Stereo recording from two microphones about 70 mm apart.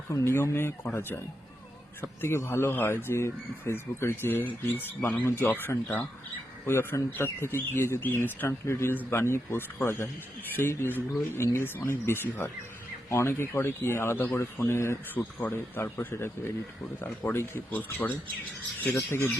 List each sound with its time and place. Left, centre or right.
0.3 s speech: left
2.0 s speech: left
7.1 s speech: left
15.1 s speech: left
18.9 s speech: left